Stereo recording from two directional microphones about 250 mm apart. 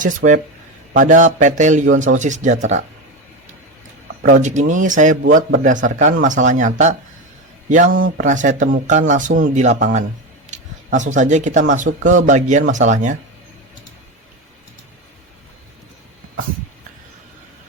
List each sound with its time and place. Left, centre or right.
0.9 s speech: right
4.4 s speech: right
5.2 s a man's voice: right
5.6 s speech: right
7.9 s a man's voice: right
8.2 s speech: right